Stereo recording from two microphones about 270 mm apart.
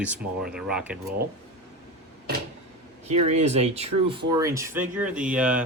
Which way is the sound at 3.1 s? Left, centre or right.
Right.